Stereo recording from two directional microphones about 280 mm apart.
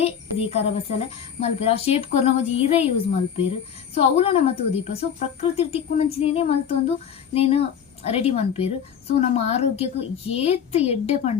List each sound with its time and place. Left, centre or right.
0.0 s a woman's voice: left
3.9 s a woman's voice: left